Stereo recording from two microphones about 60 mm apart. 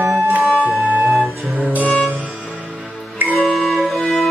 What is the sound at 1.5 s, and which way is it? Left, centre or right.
Music, right.